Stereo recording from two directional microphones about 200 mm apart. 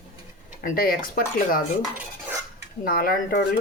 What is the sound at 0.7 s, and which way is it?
Speech, 45° left (ahead or behind).